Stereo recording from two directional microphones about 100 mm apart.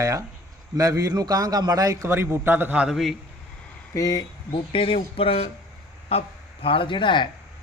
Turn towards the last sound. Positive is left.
turn(degrees=55)  # may be behind; listen again after turning